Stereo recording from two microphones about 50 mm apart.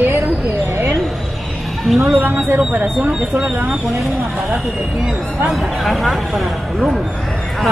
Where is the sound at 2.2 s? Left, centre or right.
Right.